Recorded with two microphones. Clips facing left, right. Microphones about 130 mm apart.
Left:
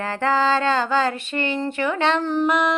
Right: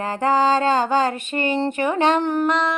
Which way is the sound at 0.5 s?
40° right (ahead or behind).